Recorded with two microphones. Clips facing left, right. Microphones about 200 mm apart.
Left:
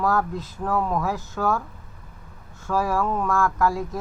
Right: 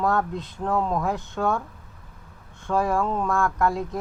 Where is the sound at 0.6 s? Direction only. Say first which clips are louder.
Even; 25° right (ahead or behind).